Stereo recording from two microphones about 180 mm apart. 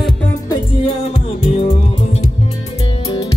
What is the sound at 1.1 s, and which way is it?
Music, 35° left (ahead or behind).